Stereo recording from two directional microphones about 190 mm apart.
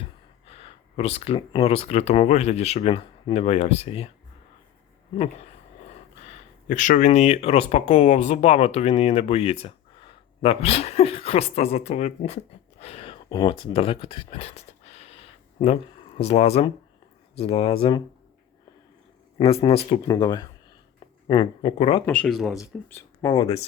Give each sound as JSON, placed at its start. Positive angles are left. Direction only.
{"t": 0.0, "sound": "speech", "side_deg": 30}
{"t": 6.2, "sound": "speech", "side_deg": 40}
{"t": 12.8, "sound": "a sound", "side_deg": 30}
{"t": 13.3, "sound": "speech", "side_deg": 25}
{"t": 19.4, "sound": "speech", "side_deg": 30}
{"t": 22.0, "sound": "speech", "side_deg": 5}
{"t": 22.9, "sound": "speech", "side_deg": 15}
{"t": 23.3, "sound": "speech", "side_deg": 25}